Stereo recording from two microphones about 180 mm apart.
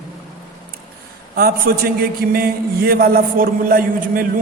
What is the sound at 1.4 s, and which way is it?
A man's voice, 55° right (ahead or behind).